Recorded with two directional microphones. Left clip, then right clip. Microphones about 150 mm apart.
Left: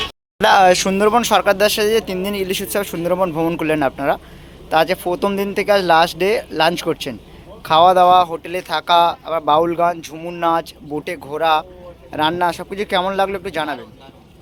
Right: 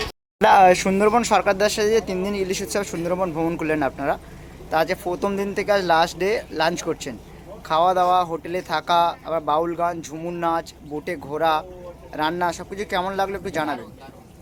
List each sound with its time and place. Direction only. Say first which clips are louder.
0.3 s speech: left 2 dB; 5° right (ahead or behind); by 13.7 s 20° left (ahead or behind)